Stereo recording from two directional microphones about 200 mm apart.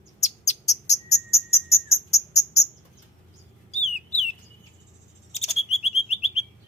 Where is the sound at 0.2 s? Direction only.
35° left (ahead or behind).